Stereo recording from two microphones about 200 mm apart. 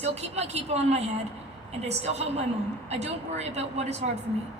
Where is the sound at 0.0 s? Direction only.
35° right (ahead or behind).